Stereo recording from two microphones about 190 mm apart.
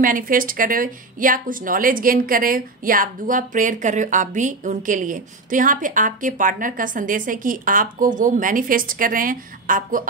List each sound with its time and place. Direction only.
0.0 s speech: 45° right (ahead or behind)